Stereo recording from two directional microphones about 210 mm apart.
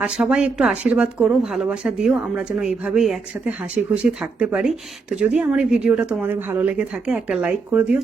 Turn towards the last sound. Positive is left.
turn(degrees=-10)  # may be behind; listen again after turning